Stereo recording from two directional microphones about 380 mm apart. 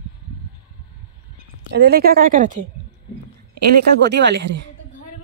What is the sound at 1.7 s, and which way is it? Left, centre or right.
Speech, right.